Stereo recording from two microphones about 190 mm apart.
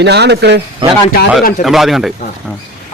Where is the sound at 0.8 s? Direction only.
25° right (ahead or behind).